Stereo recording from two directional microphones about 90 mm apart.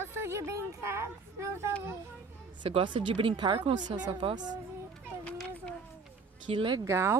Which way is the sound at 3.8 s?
55° right (ahead or behind).